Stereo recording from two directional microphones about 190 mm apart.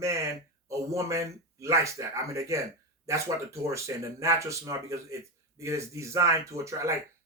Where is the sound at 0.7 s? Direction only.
15° right (ahead or behind).